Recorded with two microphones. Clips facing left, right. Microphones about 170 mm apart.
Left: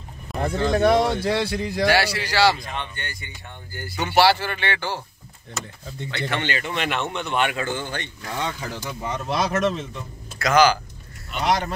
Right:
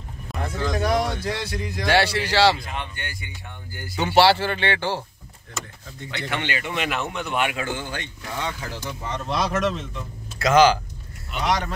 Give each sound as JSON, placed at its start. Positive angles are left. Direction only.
{"t": 0.4, "sound": "speech", "side_deg": 30}
{"t": 1.9, "sound": "a man's voice", "side_deg": 5}
{"t": 2.6, "sound": "speech", "side_deg": -10}
{"t": 4.0, "sound": "a man's voice", "side_deg": -30}
{"t": 6.0, "sound": "speech", "side_deg": -15}
{"t": 9.0, "sound": "speech", "side_deg": 10}
{"t": 10.4, "sound": "a man's voice", "side_deg": -25}
{"t": 11.3, "sound": "speech", "side_deg": 0}